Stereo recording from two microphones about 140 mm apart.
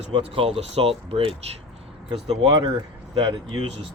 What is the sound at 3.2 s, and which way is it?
Speech, 30° right (ahead or behind).